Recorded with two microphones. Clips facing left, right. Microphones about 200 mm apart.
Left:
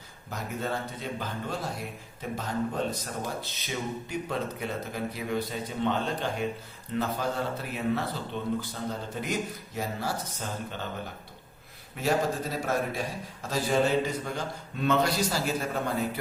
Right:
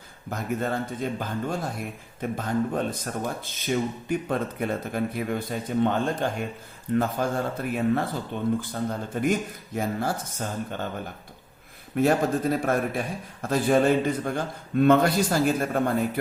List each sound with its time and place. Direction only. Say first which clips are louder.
0.3 s a man's voice: right 5 dB; 50° right (ahead or behind)
11.9 s a man's voice: right 5 dB; 55° right (ahead or behind)